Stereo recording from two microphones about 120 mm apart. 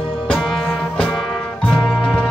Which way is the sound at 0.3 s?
5° left (ahead or behind).